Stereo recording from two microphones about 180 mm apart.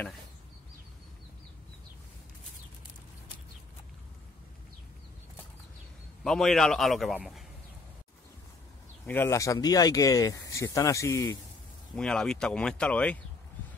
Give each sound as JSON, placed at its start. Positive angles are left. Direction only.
{"t": 6.2, "sound": "speech", "side_deg": 5}
{"t": 9.0, "sound": "speech", "side_deg": 10}
{"t": 11.9, "sound": "speech", "side_deg": 5}